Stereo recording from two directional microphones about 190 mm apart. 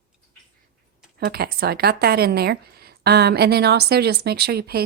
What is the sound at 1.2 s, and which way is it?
Speech, 55° right (ahead or behind).